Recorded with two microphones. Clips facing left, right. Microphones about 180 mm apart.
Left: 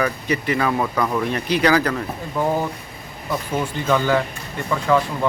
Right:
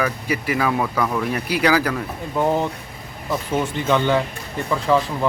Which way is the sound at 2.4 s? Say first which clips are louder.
Right 1 dB; 20° right (ahead or behind).